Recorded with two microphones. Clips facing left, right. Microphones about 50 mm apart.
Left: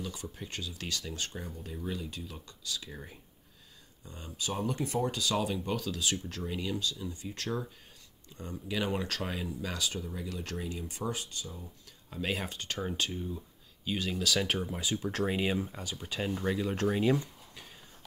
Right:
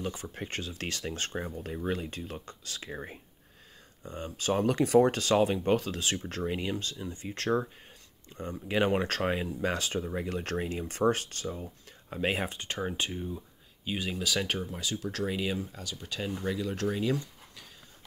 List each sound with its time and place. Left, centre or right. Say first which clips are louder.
0.0 s speech: right 4 dB; right
4.6 s speech: right 10 dB; right
5.1 s speech: right 6 dB; right; by 14.1 s centre
14.1 s speech: left 1 dB; centre
14.6 s speech: left 1 dB; centre